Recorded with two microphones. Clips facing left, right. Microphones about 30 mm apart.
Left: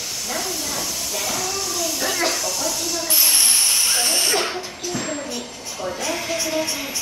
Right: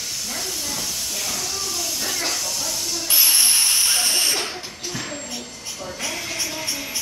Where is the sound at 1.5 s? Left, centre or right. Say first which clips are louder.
Left 3 dB; centre.